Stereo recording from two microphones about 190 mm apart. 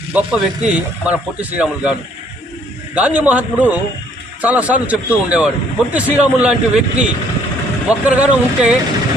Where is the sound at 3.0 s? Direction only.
10° right (ahead or behind).